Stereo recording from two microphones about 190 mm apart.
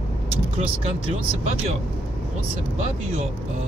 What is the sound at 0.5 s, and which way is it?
Speech, 30° right (ahead or behind).